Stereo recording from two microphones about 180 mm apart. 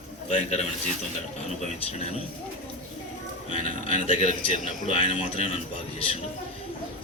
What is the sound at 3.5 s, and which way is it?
A man's voice, 35° left (ahead or behind).